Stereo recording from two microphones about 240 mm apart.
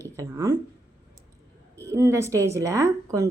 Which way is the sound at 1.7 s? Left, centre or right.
Centre.